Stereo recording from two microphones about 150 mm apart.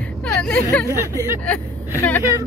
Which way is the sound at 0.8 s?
20° right (ahead or behind).